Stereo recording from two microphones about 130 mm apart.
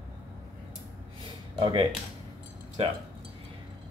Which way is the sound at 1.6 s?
35° right (ahead or behind).